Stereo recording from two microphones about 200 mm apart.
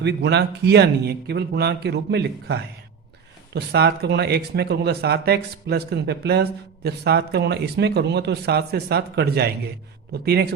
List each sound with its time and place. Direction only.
0.0 s speech: 60° right (ahead or behind)